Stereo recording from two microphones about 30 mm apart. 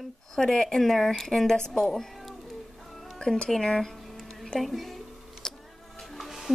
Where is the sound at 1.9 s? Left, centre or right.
Centre.